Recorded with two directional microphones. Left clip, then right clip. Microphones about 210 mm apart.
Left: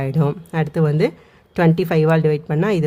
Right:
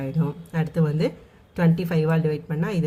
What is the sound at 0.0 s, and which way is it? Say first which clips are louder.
Speech: left 8 dB; 45° left (ahead or behind).